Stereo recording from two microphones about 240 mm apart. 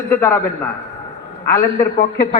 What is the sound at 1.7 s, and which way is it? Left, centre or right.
Speech, left.